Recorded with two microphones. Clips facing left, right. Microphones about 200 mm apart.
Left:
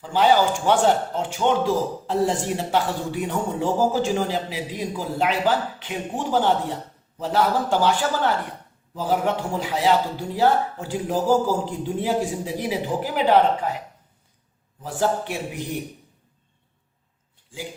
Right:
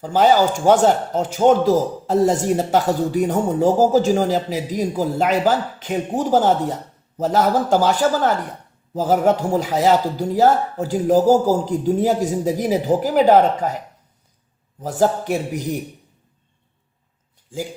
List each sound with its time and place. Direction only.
0.0 s speech: 40° right (ahead or behind)